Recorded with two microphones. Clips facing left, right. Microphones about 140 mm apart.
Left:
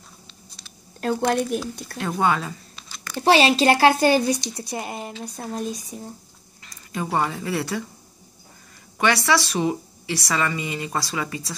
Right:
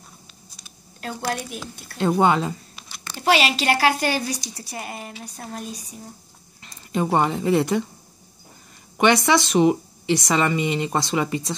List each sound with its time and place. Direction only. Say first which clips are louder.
1.0 s a woman's voice: left 7 dB; 45° left (ahead or behind)
2.0 s speech: right 4 dB; 25° right (ahead or behind)
3.2 s a woman's voice: left 3 dB; 30° left (ahead or behind)
6.6 s speech: right 6 dB; 25° right (ahead or behind)
8.9 s a woman's voice: right 3 dB; 20° right (ahead or behind)